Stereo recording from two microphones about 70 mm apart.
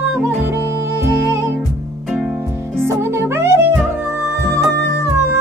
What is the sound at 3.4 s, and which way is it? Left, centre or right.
Music, right.